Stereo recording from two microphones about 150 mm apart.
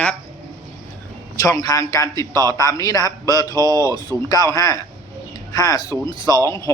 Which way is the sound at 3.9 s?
25° left (ahead or behind).